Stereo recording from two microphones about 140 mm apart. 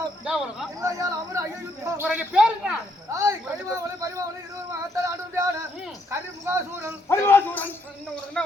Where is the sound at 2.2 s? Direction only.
5° right (ahead or behind).